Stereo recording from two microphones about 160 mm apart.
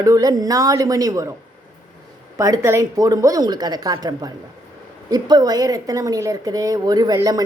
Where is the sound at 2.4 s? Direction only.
20° right (ahead or behind).